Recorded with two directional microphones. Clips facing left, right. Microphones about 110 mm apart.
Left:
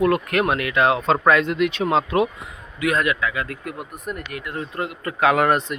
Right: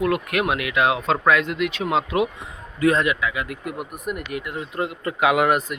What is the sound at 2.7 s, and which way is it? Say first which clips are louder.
Speech: right 2 dB; 30° right (ahead or behind).